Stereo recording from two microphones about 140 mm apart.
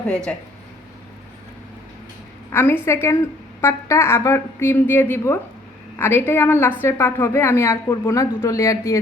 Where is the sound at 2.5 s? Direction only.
15° left (ahead or behind).